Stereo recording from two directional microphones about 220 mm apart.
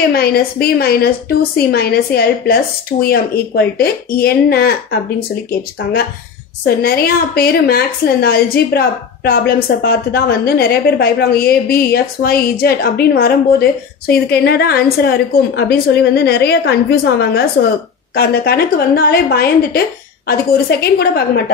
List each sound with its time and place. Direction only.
0.1 s a woman's voice: 45° left (ahead or behind)
6.6 s a woman's voice: 45° left (ahead or behind)